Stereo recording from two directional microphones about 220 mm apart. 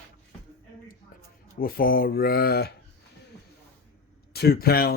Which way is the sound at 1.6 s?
40° left (ahead or behind).